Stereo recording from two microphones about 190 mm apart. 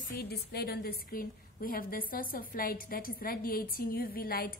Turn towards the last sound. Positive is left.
turn(degrees=50)  # may be behind; listen again after turning